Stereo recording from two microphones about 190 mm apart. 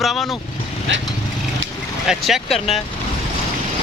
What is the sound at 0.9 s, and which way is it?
Speech, 75° right (ahead or behind).